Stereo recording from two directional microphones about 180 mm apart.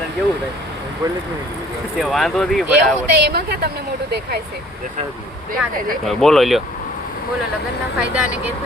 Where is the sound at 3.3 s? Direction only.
60° right (ahead or behind).